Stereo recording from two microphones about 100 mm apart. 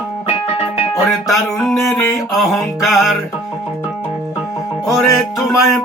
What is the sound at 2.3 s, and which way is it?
Music, centre (ahead or behind).